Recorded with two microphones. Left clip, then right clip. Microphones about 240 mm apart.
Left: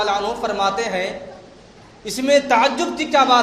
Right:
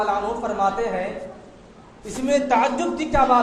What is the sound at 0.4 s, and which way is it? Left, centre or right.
Speech, left.